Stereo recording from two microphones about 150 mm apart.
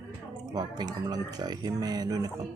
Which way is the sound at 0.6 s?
25° right (ahead or behind).